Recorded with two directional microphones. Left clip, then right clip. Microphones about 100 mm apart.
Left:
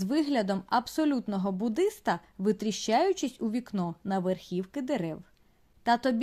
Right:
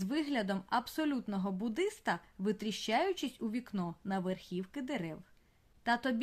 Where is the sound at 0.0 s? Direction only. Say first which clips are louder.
Left 7 dB; 45° left (ahead or behind).